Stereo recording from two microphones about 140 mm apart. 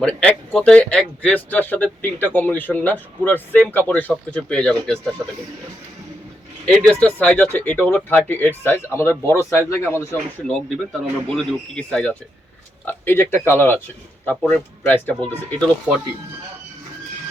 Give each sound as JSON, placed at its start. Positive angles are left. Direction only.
{"t": 0.0, "sound": "speech", "side_deg": 10}
{"t": 6.7, "sound": "speech", "side_deg": 5}
{"t": 11.3, "sound": "speech", "side_deg": 5}